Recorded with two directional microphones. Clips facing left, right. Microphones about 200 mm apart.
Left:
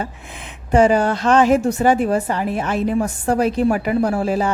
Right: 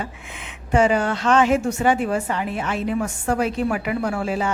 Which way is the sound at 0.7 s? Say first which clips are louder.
Left 4 dB; 40° left (ahead or behind).